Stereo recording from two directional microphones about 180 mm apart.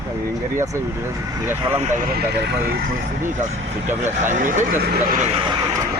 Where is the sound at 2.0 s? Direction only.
60° right (ahead or behind).